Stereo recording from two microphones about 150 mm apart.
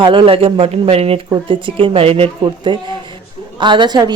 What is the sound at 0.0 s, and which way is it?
Speech, 35° right (ahead or behind).